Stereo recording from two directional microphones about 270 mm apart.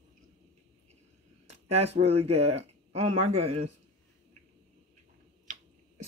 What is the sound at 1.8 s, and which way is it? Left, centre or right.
Speech, right.